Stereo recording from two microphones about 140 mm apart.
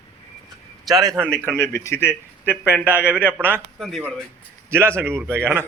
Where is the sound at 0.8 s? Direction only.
25° right (ahead or behind).